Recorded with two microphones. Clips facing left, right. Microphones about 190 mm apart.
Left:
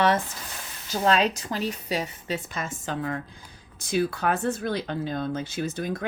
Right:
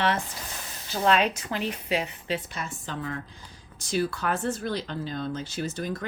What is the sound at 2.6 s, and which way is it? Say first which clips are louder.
Speech: left 3 dB; 90° left.